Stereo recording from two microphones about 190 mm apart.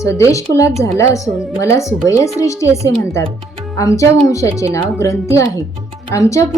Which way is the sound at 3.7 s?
15° left (ahead or behind).